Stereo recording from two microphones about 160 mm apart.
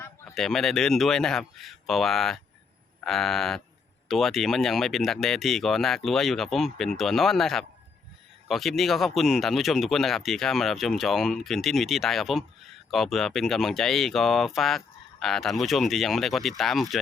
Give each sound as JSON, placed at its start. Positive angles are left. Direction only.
{"t": 0.3, "sound": "speech", "side_deg": 0}